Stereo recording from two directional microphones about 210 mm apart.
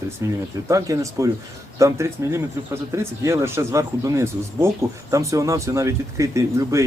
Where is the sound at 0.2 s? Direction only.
15° right (ahead or behind).